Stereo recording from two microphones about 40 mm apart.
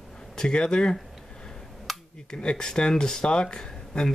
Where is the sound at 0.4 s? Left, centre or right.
Left.